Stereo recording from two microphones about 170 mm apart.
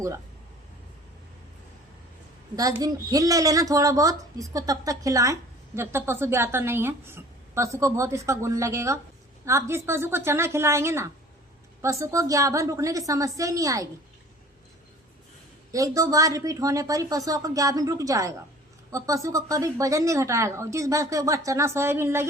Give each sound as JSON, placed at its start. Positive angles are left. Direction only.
{"t": 2.6, "sound": "a woman's voice", "side_deg": -20}
{"t": 15.7, "sound": "a woman's voice", "side_deg": -20}